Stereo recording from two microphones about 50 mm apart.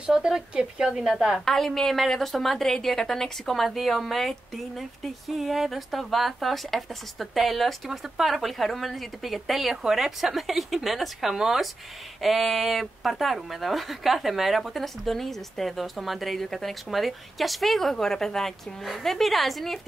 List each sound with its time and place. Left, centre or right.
0.0 s speech: centre
1.4 s a woman's voice: centre